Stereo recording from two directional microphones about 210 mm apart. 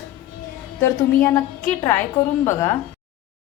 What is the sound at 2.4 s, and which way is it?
Speech, 15° left (ahead or behind).